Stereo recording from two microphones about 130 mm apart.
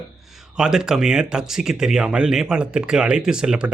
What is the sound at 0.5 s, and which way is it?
Speech, 5° right (ahead or behind).